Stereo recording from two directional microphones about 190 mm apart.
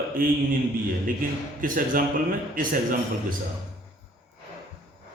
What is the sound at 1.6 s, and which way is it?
A man's voice, 45° right (ahead or behind).